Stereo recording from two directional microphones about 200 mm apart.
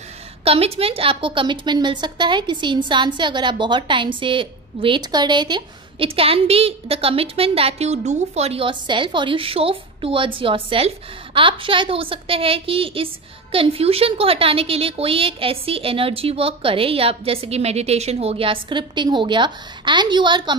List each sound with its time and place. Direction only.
0.4 s a woman's voice: 30° right (ahead or behind)